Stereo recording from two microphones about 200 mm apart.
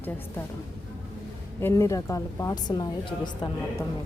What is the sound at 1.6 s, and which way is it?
A woman's voice, 15° left (ahead or behind).